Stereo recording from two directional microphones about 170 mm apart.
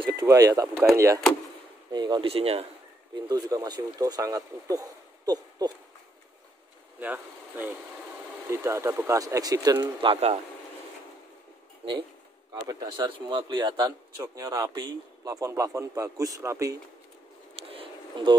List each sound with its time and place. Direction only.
0.2 s speech: 20° right (ahead or behind)
3.3 s speech: 20° right (ahead or behind)
7.0 s speech: 10° right (ahead or behind)
10.0 s speech: 35° right (ahead or behind)
12.5 s speech: 25° right (ahead or behind)
17.6 s a sound: 30° right (ahead or behind)